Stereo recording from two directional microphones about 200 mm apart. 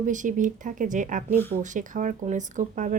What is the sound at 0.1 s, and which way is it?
Speech, 40° right (ahead or behind).